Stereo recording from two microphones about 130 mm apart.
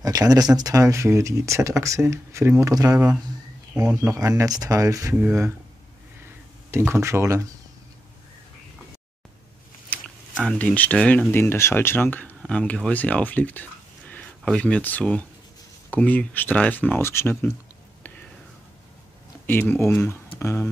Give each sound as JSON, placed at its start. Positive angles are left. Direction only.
{"t": 0.0, "sound": "speech", "side_deg": -30}
{"t": 4.1, "sound": "speech", "side_deg": -25}
{"t": 6.7, "sound": "speech", "side_deg": -20}
{"t": 9.8, "sound": "speech", "side_deg": 5}
{"t": 19.4, "sound": "speech", "side_deg": 15}